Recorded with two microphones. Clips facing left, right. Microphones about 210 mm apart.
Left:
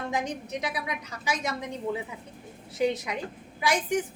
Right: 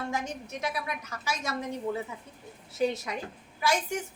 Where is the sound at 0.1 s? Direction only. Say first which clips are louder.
Left 3 dB; 15° left (ahead or behind).